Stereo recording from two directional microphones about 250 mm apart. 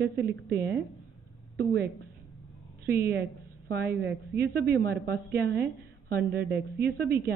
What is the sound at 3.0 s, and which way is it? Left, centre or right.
A woman's voice, right.